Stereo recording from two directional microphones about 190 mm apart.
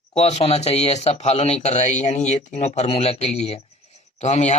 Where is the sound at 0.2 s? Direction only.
35° left (ahead or behind).